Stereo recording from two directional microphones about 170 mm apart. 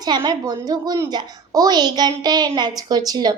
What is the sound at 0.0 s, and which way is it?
Child singing, 25° right (ahead or behind).